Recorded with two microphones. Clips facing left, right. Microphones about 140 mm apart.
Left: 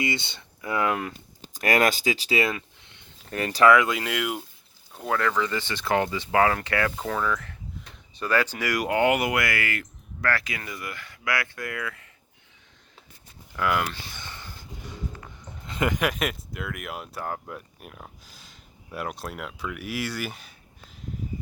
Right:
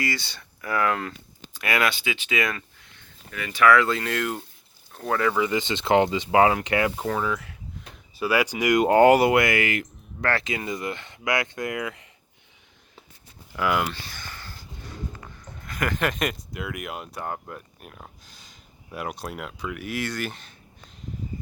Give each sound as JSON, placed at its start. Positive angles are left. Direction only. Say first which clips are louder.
{"t": 0.0, "sound": "speech", "louder": "left 1 dB", "side_deg": 20}
{"t": 1.4, "sound": "speech", "louder": "left 3 dB", "side_deg": 40}
{"t": 2.8, "sound": "a sound", "louder": "right 1 dB", "side_deg": 20}
{"t": 3.3, "sound": "speech", "louder": "left 2 dB", "side_deg": 40}
{"t": 3.7, "sound": "speech", "louder": "right 2 dB", "side_deg": 15}
{"t": 5.0, "sound": "speech", "louder": "right 2 dB", "side_deg": -5}
{"t": 8.9, "sound": "speech", "louder": "right 7 dB", "side_deg": -40}
{"t": 13.6, "sound": "speech", "louder": "right 1 dB", "side_deg": -5}
{"t": 13.9, "sound": "a sound", "louder": "right 1 dB", "side_deg": 20}
{"t": 16.0, "sound": "speech", "louder": "even", "side_deg": 5}